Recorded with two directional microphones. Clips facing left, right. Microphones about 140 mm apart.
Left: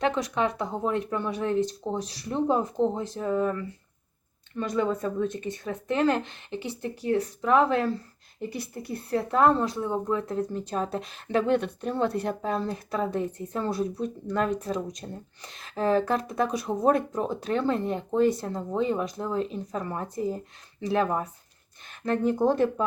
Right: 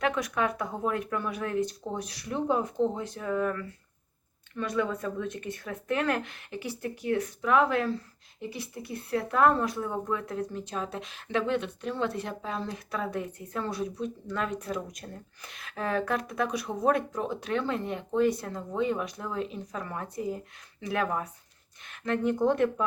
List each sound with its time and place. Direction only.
0.0 s speech: 25° left (ahead or behind)
8.4 s speech: 40° left (ahead or behind)
9.1 s speech: 30° left (ahead or behind)
14.0 s speech: 40° left (ahead or behind)
14.8 s speech: 25° left (ahead or behind)